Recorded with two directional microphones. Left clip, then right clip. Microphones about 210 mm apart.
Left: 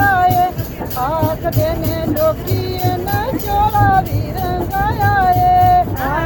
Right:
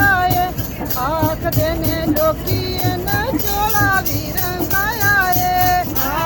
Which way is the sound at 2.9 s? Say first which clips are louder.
Even; 15° right (ahead or behind).